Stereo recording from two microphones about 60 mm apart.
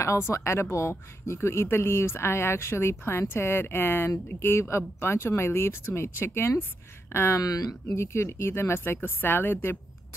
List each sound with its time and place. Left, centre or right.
0.0 s speech: left